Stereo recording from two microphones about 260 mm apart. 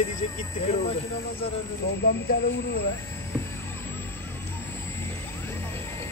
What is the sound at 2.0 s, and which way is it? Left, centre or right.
Speech, left.